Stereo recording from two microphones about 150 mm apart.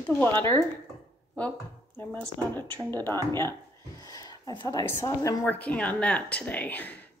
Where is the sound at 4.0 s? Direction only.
25° left (ahead or behind).